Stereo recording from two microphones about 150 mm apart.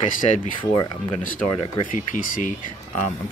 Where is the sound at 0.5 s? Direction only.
25° left (ahead or behind).